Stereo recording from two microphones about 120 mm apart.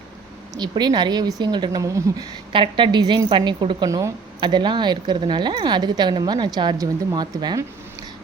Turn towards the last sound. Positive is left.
turn(degrees=-35)  # may be behind; listen again after turning